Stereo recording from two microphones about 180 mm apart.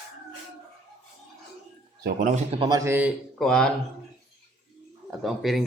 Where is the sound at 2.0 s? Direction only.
45° right (ahead or behind).